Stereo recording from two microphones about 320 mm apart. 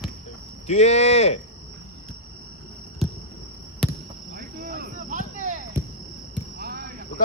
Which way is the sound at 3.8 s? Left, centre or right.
Centre.